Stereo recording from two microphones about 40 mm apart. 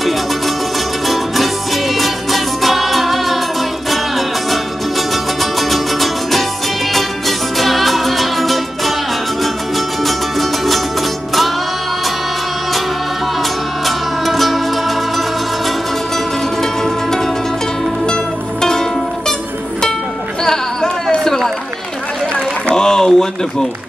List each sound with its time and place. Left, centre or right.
1.0 s music: centre
4.5 s music: centre
13.4 s music: centre
16.8 s music: centre
22.8 s a sound: centre